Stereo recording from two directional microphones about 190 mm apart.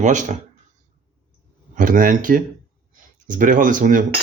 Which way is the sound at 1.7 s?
45° right (ahead or behind).